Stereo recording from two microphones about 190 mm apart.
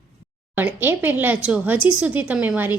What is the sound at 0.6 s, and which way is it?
Speech, 10° right (ahead or behind).